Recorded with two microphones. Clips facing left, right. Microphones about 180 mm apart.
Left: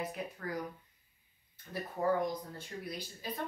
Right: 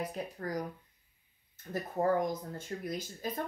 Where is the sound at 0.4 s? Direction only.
40° right (ahead or behind).